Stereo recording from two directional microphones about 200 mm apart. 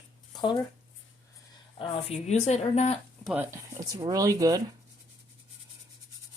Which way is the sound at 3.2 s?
10° right (ahead or behind).